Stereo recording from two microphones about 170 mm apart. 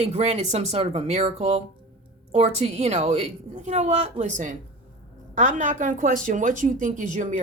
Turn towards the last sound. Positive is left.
turn(degrees=-45)  # may be behind; listen again after turning